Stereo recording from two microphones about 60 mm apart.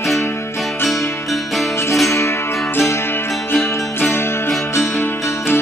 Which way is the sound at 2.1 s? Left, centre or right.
Left.